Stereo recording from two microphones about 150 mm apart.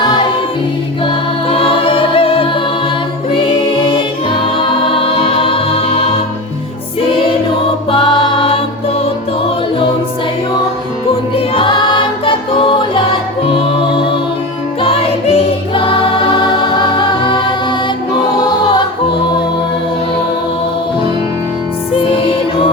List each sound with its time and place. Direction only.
1.5 s music: 40° left (ahead or behind)
7.9 s music: 30° left (ahead or behind)
11.1 s music: 35° left (ahead or behind)